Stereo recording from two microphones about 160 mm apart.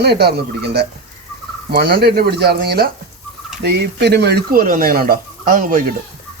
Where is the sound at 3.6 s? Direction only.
90° right; by 5.8 s 60° right (ahead or behind).